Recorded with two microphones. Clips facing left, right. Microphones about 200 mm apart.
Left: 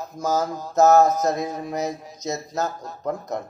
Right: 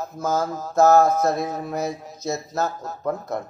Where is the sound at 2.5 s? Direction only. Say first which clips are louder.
Right 1 dB; centre (ahead or behind).